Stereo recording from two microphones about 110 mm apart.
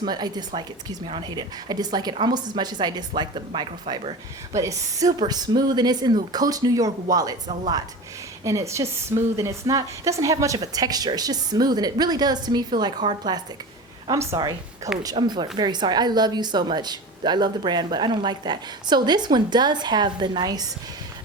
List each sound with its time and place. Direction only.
0.0 s speech: 40° right (ahead or behind)
4.5 s speech: 30° right (ahead or behind)
8.4 s speech: 30° right (ahead or behind)